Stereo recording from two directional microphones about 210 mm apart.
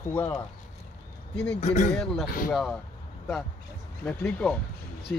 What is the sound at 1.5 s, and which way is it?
Speech, 35° left (ahead or behind).